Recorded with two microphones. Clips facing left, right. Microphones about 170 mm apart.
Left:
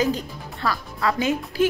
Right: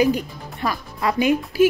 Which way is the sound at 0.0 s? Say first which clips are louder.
Right 4 dB; 15° right (ahead or behind).